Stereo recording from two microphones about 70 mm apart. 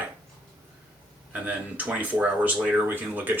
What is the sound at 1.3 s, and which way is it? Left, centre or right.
Speech, right.